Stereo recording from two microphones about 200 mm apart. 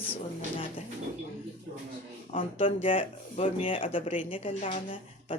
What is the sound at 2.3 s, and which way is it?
Speech, 25° left (ahead or behind).